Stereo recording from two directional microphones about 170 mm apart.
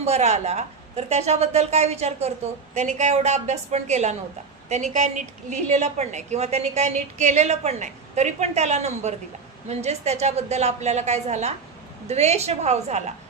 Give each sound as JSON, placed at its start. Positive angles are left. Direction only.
{"t": 0.0, "sound": "a woman's voice", "side_deg": -40}